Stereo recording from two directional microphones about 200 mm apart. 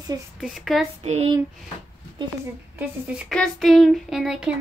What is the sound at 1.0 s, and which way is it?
Speech, 30° right (ahead or behind).